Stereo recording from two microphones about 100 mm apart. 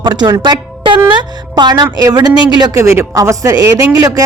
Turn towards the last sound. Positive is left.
turn(degrees=-35)  # may be behind; listen again after turning